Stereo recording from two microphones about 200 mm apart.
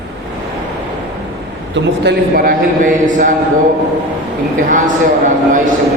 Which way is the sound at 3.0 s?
40° right (ahead or behind).